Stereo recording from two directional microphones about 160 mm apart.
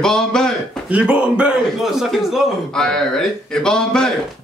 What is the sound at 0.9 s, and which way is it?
A man's voice, 5° right (ahead or behind).